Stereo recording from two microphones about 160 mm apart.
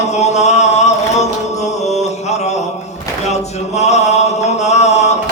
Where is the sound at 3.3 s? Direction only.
45° left (ahead or behind).